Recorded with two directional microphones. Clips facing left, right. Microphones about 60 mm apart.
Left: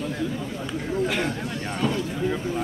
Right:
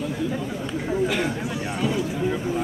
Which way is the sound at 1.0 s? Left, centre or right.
Centre.